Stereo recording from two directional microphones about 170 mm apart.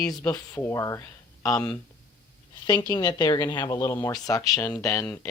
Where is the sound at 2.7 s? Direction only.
25° left (ahead or behind).